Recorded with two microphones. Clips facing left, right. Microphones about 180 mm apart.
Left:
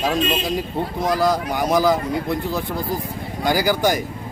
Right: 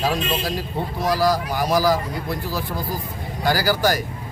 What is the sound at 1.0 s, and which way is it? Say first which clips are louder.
A man's voice: even; 20° left (ahead or behind).